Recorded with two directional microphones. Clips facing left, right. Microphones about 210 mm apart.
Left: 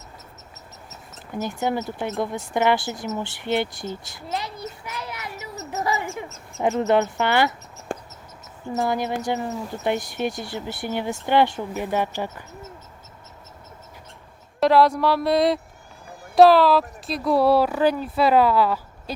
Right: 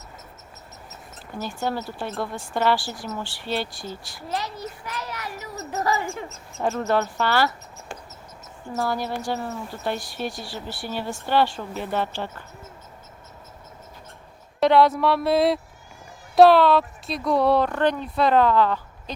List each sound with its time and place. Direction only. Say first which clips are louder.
1.6 s speech: left 2 dB; 20° left (ahead or behind)
7.9 s a sound: left 8 dB; 50° left (ahead or behind)
8.7 s speech: left 3 dB; 20° left (ahead or behind)
14.6 s speech: even; centre (ahead or behind)